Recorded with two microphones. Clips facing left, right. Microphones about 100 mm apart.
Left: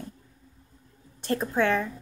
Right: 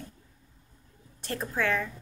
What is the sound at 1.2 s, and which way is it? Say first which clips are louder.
Speech: left 5 dB; 30° left (ahead or behind).